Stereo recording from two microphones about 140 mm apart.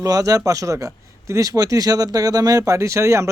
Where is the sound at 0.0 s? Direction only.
25° right (ahead or behind).